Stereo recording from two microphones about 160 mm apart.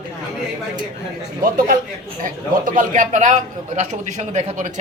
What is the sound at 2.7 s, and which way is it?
Speech, 55° right (ahead or behind).